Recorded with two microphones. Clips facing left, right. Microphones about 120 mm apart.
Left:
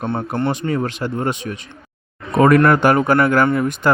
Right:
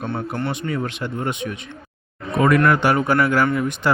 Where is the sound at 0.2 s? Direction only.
45° left (ahead or behind).